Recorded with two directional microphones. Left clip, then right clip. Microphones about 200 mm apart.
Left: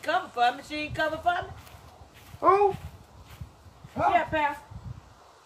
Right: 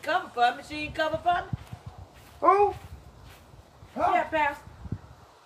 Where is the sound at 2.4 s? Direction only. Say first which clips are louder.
Even; 30° left (ahead or behind).